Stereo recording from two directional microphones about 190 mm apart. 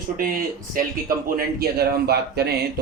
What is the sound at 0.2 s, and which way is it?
Speech, 50° right (ahead or behind).